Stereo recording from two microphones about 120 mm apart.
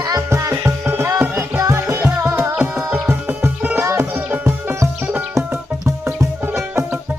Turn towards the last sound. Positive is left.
turn(degrees=-20)  # may be behind; listen again after turning